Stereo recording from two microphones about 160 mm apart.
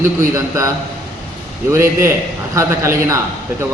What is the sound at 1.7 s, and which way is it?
A man's voice, 15° right (ahead or behind).